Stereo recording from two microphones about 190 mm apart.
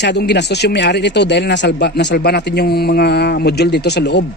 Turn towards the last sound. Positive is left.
turn(degrees=60)  # may be behind; listen again after turning